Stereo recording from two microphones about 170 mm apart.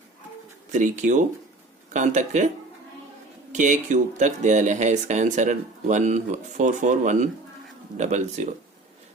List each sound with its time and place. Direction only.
0.7 s speech: 45° right (ahead or behind)
3.5 s speech: 45° right (ahead or behind)